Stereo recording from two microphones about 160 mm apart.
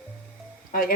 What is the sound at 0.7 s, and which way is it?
Speech, 60° left (ahead or behind).